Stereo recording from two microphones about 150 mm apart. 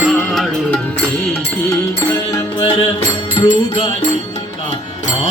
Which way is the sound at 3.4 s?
35° left (ahead or behind).